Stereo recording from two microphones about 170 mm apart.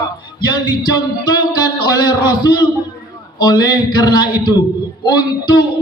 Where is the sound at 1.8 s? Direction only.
25° left (ahead or behind).